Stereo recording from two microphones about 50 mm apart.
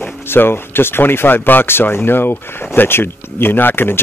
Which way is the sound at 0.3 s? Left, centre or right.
Left.